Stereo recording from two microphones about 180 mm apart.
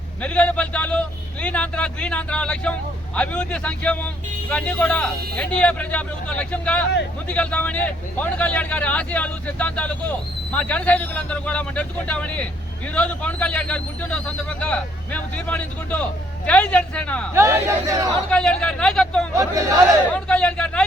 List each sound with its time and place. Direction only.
0.2 s speech: 10° left (ahead or behind)
17.3 s speech: 15° right (ahead or behind)
18.3 s a man's voice: 5° left (ahead or behind)
19.3 s speech: 15° right (ahead or behind)
20.1 s a man's voice: 5° left (ahead or behind)